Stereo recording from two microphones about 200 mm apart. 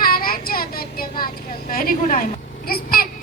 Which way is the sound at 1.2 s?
45° left (ahead or behind).